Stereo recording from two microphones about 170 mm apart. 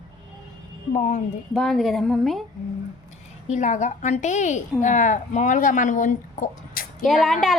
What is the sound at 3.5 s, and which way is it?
Speech, 45° left (ahead or behind).